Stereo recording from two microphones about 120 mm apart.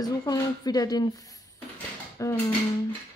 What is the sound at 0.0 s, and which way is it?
Speech, 30° left (ahead or behind).